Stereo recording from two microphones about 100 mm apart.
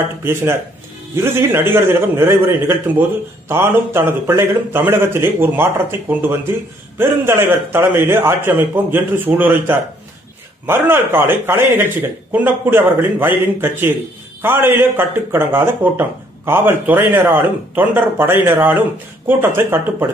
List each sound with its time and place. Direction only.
0.2 s a man's voice: 25° right (ahead or behind)